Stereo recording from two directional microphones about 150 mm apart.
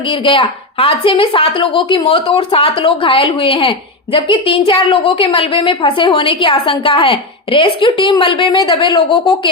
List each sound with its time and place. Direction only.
0.1 s a woman's voice: 35° left (ahead or behind)